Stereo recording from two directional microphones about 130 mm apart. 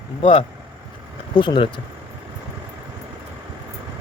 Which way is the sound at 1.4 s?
40° left (ahead or behind).